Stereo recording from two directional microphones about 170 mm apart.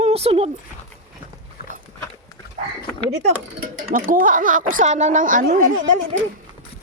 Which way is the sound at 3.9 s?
55° right (ahead or behind).